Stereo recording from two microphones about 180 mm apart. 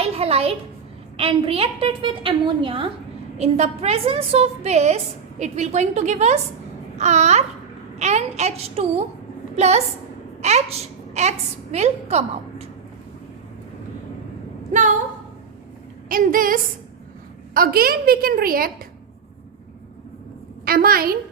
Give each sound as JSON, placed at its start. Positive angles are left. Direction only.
{"t": 0.0, "sound": "a child's voice", "side_deg": -35}
{"t": 14.7, "sound": "a woman's voice", "side_deg": -45}
{"t": 16.0, "sound": "a woman's voice", "side_deg": -50}
{"t": 20.7, "sound": "a woman's voice", "side_deg": -55}